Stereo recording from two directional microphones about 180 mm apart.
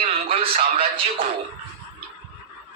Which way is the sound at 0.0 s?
30° right (ahead or behind).